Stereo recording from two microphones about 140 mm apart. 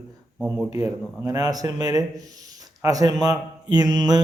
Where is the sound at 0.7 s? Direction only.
25° right (ahead or behind).